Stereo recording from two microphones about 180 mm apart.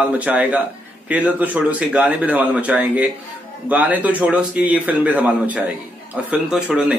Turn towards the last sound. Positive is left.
turn(degrees=-5)  # may be behind; listen again after turning